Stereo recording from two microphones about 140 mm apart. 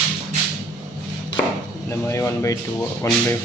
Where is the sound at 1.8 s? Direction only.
20° left (ahead or behind).